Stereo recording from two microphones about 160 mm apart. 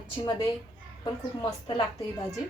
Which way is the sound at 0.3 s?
25° left (ahead or behind).